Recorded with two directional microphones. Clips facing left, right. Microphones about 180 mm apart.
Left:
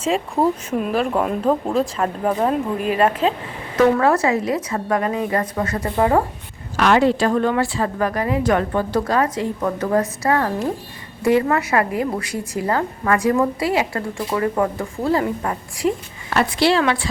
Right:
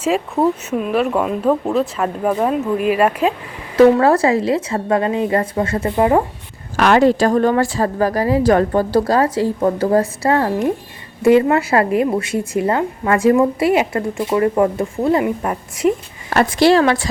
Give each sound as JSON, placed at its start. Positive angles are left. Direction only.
{"t": 0.7, "sound": "speech", "side_deg": 0}
{"t": 3.8, "sound": "a woman's voice", "side_deg": -30}
{"t": 6.7, "sound": "a woman's voice", "side_deg": -45}
{"t": 16.3, "sound": "speech", "side_deg": -45}